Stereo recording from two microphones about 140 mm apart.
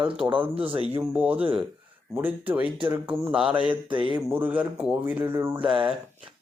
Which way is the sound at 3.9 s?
35° right (ahead or behind).